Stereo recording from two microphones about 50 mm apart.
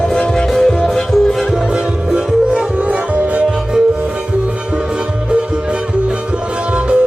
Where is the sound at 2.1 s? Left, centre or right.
Centre.